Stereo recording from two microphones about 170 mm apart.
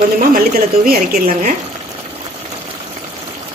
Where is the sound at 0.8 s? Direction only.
55° right (ahead or behind).